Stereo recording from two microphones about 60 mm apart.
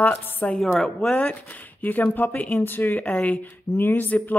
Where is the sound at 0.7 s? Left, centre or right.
Centre.